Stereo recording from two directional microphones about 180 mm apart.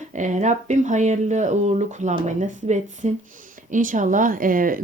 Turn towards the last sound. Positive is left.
turn(degrees=-50)  # may be behind; listen again after turning